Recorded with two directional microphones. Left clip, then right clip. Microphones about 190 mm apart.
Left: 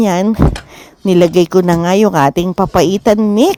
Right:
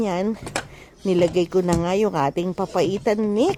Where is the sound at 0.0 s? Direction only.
35° left (ahead or behind).